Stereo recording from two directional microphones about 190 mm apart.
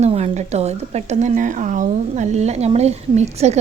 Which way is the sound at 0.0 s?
35° right (ahead or behind).